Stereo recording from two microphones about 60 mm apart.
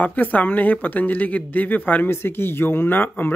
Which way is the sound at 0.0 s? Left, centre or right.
Left.